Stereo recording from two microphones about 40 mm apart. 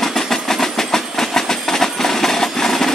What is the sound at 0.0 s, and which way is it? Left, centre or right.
Train, centre.